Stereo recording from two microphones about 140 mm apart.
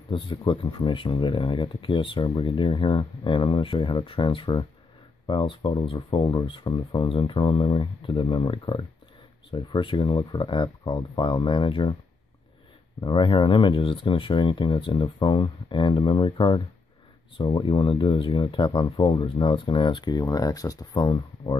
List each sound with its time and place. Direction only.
0.1 s speech: 35° left (ahead or behind)
13.0 s speech: 35° left (ahead or behind)